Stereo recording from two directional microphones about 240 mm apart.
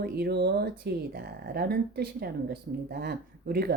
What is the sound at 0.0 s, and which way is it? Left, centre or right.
A woman's voice, right.